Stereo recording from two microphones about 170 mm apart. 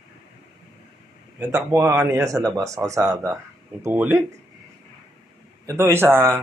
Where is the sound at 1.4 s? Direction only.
15° right (ahead or behind).